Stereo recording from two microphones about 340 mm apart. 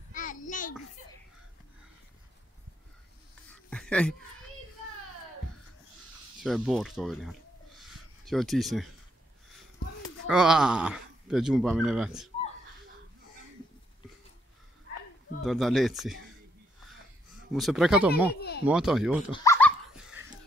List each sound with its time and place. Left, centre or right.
0.1 s a sound: left
3.7 s a sound: centre
6.4 s speech: centre
7.8 s a sound: centre
10.2 s speech: centre
15.4 s speech: centre
17.5 s speech: centre
18.3 s speech: left
18.7 s speech: centre
19.3 s dog: centre